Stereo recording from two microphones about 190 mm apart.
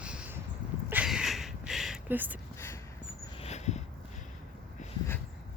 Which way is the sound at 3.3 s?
35° left (ahead or behind).